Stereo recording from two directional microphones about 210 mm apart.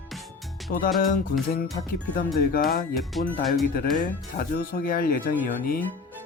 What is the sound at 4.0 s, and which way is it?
Speech, 45° left (ahead or behind).